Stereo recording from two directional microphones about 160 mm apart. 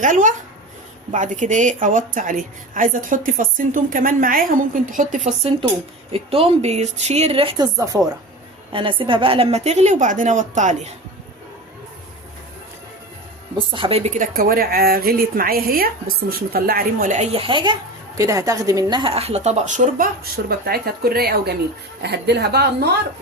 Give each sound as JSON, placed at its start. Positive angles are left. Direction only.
{"t": 0.0, "sound": "a woman's voice", "side_deg": -55}
{"t": 5.4, "sound": "a woman's voice", "side_deg": -35}
{"t": 8.7, "sound": "a woman's voice", "side_deg": -30}
{"t": 13.7, "sound": "speech", "side_deg": -35}
{"t": 17.3, "sound": "speech", "side_deg": -30}
{"t": 20.2, "sound": "a woman's voice", "side_deg": -75}